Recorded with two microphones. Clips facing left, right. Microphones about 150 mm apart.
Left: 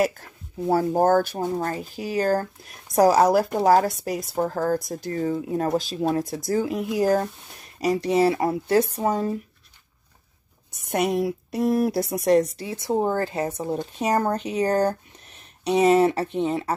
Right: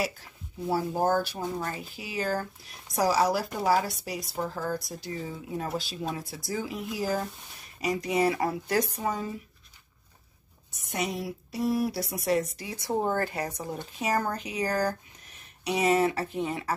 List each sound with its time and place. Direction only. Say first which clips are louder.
0.0 s speech: left 9 dB; 50° left (ahead or behind)
7.8 s speech: left 6 dB; 35° left (ahead or behind)
8.9 s speech: left 7 dB; 40° left (ahead or behind)
10.9 s speech: left 9 dB; 60° left (ahead or behind)
12.3 s a woman's voice: left 8 dB; 40° left (ahead or behind); by 13.5 s 25° left (ahead or behind)
13.9 s a woman's voice: left 5 dB; 35° left (ahead or behind)